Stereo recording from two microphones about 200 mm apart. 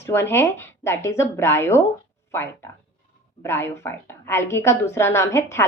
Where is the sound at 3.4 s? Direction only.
10° left (ahead or behind).